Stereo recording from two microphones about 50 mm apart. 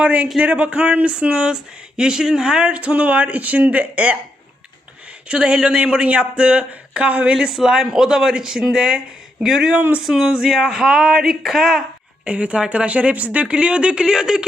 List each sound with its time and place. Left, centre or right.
0.0 s speech: right
5.3 s speech: centre
7.3 s speech: centre
12.2 s speech: right